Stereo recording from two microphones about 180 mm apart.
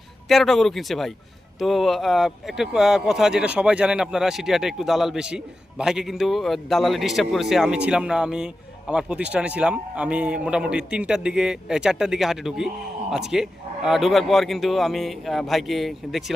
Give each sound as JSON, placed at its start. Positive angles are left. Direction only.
{"t": 0.3, "sound": "speech", "side_deg": 0}